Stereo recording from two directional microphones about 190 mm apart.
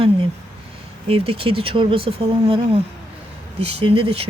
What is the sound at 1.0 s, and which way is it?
Speech, 30° right (ahead or behind).